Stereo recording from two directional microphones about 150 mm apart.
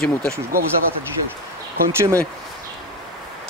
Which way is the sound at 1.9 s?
15° right (ahead or behind).